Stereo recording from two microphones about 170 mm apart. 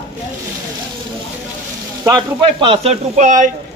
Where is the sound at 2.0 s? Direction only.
25° right (ahead or behind); by 3.5 s 45° right (ahead or behind).